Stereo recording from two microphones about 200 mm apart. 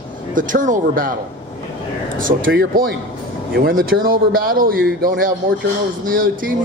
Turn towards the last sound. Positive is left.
turn(degrees=-45)  # may be behind; listen again after turning